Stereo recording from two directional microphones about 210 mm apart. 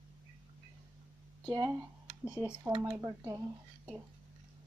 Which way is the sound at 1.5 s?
20° right (ahead or behind).